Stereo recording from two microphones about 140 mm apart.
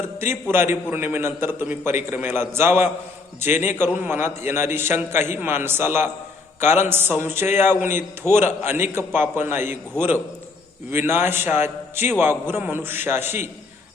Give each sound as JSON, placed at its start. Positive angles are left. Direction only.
{"t": 0.2, "sound": "a man's voice", "side_deg": -15}
{"t": 8.2, "sound": "a man's voice", "side_deg": 20}
{"t": 8.6, "sound": "a man's voice", "side_deg": -15}
{"t": 10.9, "sound": "a man's voice", "side_deg": -15}